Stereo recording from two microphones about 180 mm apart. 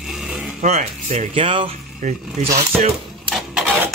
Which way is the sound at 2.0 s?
45° right (ahead or behind).